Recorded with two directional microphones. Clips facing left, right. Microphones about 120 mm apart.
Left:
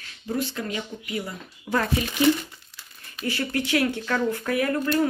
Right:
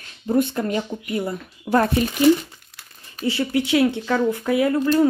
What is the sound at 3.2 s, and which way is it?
Speech, 20° right (ahead or behind).